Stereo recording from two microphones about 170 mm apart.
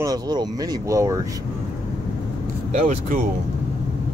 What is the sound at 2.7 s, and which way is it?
Speech, 45° right (ahead or behind).